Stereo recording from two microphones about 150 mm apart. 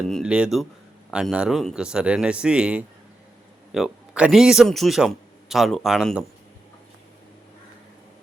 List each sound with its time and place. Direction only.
0.1 s speech: 5° right (ahead or behind)